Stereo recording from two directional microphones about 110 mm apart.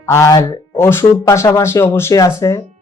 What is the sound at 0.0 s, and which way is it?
Speech, 25° left (ahead or behind).